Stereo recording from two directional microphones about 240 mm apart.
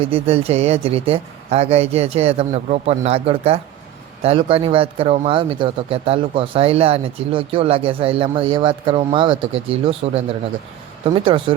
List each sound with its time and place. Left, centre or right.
0.0 s speech: right